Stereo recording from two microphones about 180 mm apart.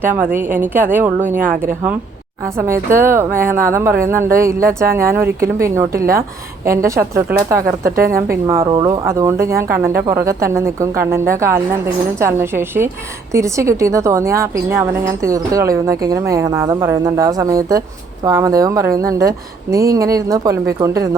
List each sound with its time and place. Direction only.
0.0 s a woman's voice: 10° right (ahead or behind)
1.4 s speech: 50° right (ahead or behind)
2.6 s a woman's voice: 15° right (ahead or behind)
6.7 s a woman's voice: 15° right (ahead or behind)
7.9 s speech: 55° right (ahead or behind)
8.1 s a woman's voice: 15° right (ahead or behind)